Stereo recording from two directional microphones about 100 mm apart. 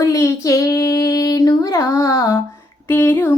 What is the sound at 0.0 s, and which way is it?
Female singing, 30° left (ahead or behind).